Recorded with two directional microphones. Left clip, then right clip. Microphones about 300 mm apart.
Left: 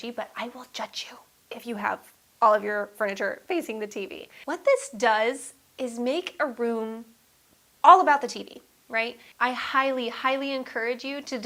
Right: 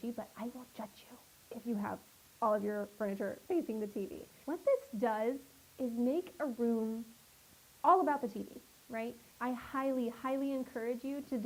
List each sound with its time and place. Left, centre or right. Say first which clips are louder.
0.0 s speech: left 10 dB; centre
3.9 s a woman's voice: left 8 dB; left
4.4 s speech: left 10 dB; centre